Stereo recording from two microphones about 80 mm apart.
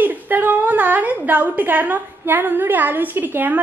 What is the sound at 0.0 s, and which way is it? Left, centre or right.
A woman's voice, right.